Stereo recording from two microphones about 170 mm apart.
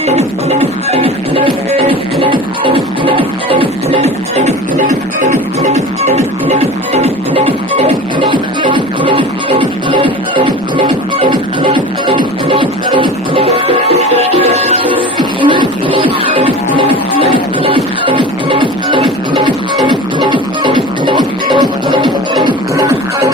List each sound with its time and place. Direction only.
0.1 s music: 35° right (ahead or behind)
15.1 s music: 25° right (ahead or behind)